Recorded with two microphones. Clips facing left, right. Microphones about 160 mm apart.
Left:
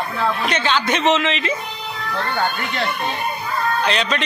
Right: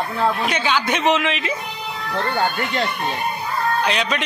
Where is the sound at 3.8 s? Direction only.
10° right (ahead or behind).